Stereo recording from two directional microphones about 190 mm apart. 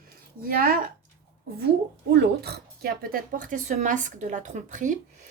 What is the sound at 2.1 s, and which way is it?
Speech, 60° right (ahead or behind).